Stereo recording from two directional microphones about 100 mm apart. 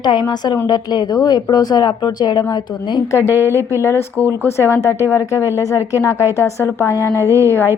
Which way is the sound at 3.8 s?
25° left (ahead or behind).